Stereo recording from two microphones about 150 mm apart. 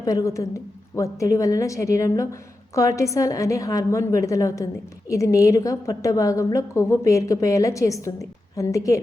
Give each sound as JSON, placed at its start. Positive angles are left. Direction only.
{"t": 0.0, "sound": "a woman's voice", "side_deg": 25}